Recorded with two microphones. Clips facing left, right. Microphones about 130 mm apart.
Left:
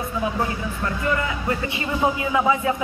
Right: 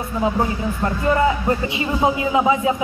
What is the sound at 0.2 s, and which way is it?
Speech, 30° right (ahead or behind).